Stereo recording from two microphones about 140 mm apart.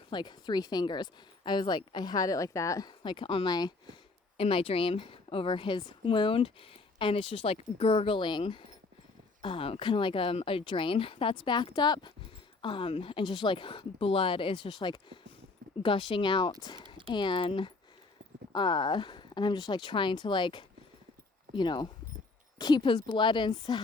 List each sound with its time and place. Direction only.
0.1 s a woman's voice: 35° left (ahead or behind)
4.4 s a woman's voice: 40° left (ahead or behind)